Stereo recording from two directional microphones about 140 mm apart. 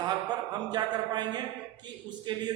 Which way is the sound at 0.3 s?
30° right (ahead or behind).